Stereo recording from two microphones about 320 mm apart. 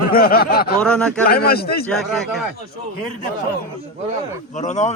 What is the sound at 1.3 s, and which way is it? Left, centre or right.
Speech, left.